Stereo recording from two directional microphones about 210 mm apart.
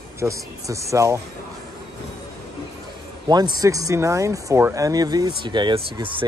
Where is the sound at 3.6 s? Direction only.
15° right (ahead or behind).